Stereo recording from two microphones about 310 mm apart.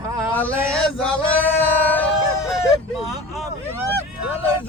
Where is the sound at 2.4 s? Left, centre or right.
Centre.